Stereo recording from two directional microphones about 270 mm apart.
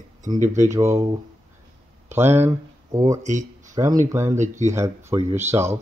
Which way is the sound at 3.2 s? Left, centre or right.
Right.